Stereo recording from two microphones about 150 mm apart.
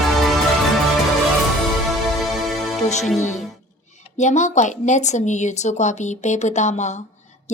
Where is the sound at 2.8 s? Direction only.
50° left (ahead or behind).